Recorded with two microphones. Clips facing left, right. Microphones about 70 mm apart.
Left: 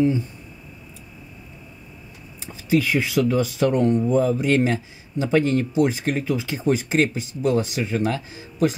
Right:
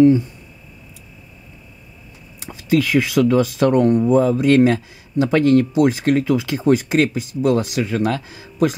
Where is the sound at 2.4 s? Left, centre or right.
Right.